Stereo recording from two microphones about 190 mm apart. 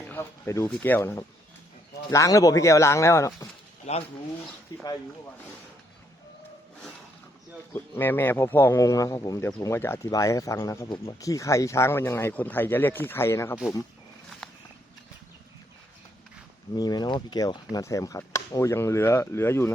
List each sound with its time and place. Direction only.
0.1 s speech: 15° left (ahead or behind)
3.9 s speech: 35° left (ahead or behind)
7.7 s speech: 10° left (ahead or behind)
16.7 s speech: 20° left (ahead or behind)